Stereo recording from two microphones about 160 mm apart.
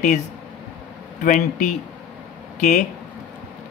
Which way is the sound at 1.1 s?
55° left (ahead or behind).